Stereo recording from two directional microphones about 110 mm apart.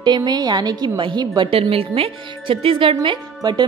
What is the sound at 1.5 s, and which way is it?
Speech, 60° right (ahead or behind).